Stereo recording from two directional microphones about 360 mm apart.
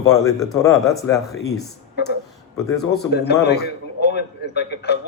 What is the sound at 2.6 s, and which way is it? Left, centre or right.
Speech, centre.